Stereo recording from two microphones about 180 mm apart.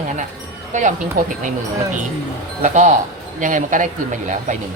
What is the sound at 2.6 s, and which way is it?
Speech, 40° right (ahead or behind).